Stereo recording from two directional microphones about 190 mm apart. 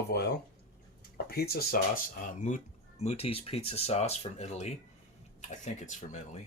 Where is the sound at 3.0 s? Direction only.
30° left (ahead or behind).